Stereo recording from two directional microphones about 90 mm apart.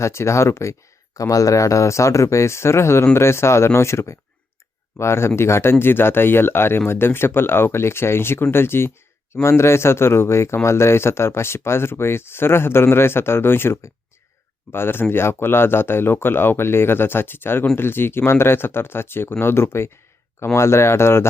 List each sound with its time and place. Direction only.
0.0 s speech: 30° left (ahead or behind)